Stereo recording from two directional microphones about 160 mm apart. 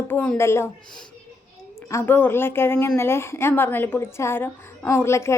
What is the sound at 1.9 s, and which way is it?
A woman's voice, 15° left (ahead or behind).